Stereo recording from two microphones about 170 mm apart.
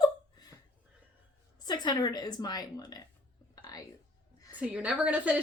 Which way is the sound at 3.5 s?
25° left (ahead or behind).